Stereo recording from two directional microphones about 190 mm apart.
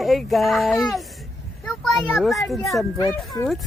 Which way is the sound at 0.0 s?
Centre (ahead or behind).